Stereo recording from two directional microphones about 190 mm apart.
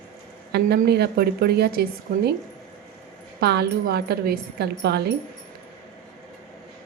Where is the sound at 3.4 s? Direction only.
60° right (ahead or behind).